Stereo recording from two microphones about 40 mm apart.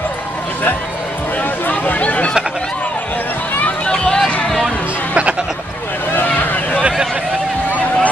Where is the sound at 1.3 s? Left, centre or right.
Left.